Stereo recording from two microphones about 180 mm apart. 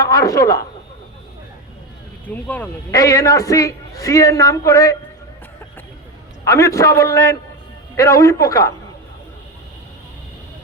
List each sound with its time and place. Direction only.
0.0 s speech: 20° left (ahead or behind)
2.2 s a man's voice: 10° left (ahead or behind)
2.9 s a man's voice: 20° left (ahead or behind)
6.4 s a man's voice: 15° left (ahead or behind)